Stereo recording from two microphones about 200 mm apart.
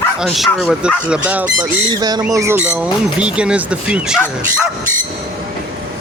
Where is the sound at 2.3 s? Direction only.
15° right (ahead or behind).